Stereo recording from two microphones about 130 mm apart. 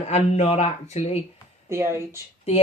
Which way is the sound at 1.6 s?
20° right (ahead or behind).